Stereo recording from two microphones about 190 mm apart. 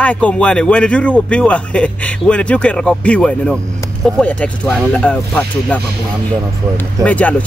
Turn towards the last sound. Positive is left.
turn(degrees=5)  # may be behind; listen again after turning